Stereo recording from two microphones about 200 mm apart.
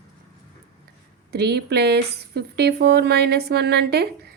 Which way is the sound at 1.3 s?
55° right (ahead or behind).